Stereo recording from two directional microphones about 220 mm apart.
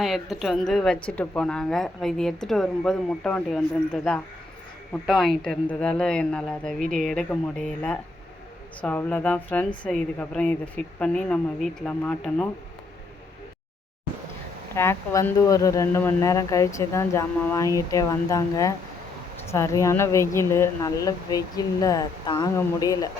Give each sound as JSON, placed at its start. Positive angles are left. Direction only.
{"t": 0.0, "sound": "a woman's voice", "side_deg": 0}
{"t": 8.8, "sound": "a woman's voice", "side_deg": 5}
{"t": 14.8, "sound": "speech", "side_deg": 10}